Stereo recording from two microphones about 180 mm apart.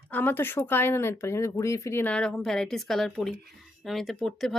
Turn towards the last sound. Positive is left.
turn(degrees=0)  # may be behind; listen again after turning